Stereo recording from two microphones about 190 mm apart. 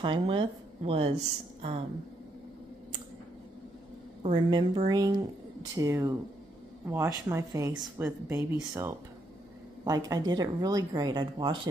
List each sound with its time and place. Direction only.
0.0 s speech: 25° right (ahead or behind)
4.2 s speech: 25° right (ahead or behind)